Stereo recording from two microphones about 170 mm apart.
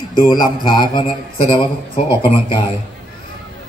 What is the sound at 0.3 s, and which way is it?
A man's voice, 25° left (ahead or behind).